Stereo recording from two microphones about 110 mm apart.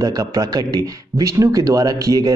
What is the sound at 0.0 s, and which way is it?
Speech, 35° right (ahead or behind).